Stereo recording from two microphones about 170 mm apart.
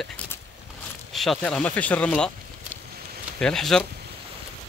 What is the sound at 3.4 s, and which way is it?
Speech, 5° left (ahead or behind).